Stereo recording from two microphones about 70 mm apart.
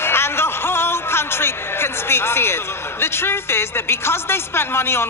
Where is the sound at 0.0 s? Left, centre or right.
Left.